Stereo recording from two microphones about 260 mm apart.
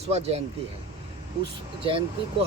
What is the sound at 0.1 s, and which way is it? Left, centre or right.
Speech, right.